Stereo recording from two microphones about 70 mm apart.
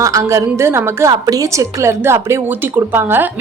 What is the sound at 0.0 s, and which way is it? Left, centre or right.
A woman's voice, right.